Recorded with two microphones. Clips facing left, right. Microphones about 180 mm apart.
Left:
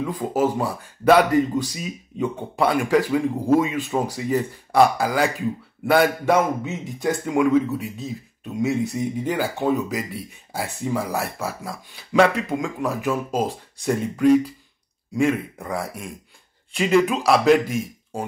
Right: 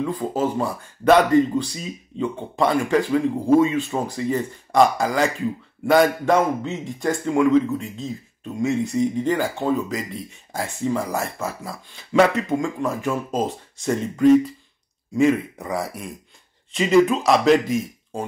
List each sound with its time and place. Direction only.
0.0 s speech: 5° left (ahead or behind)